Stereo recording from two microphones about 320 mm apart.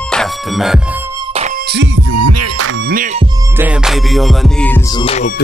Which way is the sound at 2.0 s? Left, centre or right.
Right.